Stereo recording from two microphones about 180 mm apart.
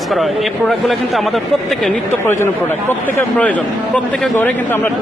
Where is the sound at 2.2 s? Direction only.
15° left (ahead or behind).